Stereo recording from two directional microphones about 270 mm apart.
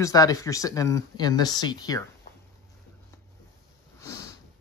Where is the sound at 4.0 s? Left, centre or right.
Centre.